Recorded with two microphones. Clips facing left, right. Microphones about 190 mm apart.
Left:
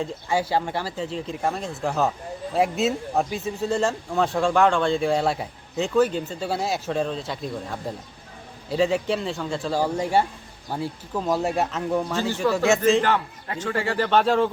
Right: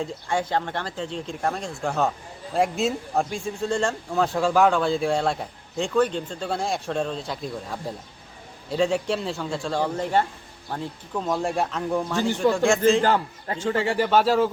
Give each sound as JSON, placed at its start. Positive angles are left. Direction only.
{"t": 0.0, "sound": "speech", "side_deg": 5}
{"t": 13.0, "sound": "a man's voice", "side_deg": -30}